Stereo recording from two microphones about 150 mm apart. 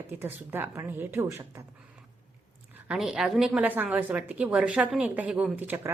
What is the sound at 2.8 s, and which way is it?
A woman's voice, 5° right (ahead or behind).